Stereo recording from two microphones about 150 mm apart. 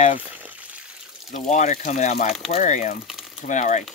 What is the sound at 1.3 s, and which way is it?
Speech, 50° left (ahead or behind).